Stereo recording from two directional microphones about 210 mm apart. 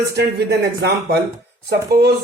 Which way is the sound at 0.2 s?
50° right (ahead or behind).